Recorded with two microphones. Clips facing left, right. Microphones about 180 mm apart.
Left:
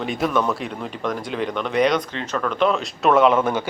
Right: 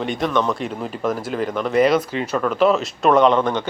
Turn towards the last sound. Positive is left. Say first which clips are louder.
# right 1 dB
turn(degrees=10)  # may be behind; listen again after turning